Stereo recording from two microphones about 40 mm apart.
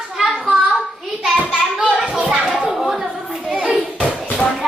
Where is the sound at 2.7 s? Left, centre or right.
Centre.